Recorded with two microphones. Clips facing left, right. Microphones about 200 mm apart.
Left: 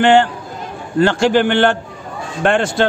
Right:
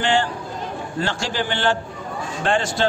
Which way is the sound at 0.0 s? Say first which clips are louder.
Left 9 dB; 60° left (ahead or behind).